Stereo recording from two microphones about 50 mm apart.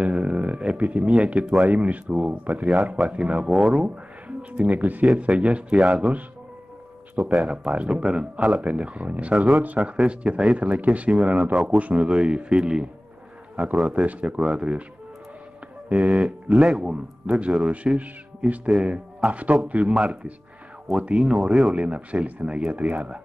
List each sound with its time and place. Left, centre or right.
0.0 s a sound: right
1.4 s speech: centre
1.7 s a man's voice: right
3.4 s speech: centre
3.8 s speech: right
5.0 s a man's voice: right
7.3 s speech: right
8.6 s a man's voice: right
14.4 s speech: centre
15.9 s a man's voice: right
19.9 s speech: centre
21.7 s a man's voice: right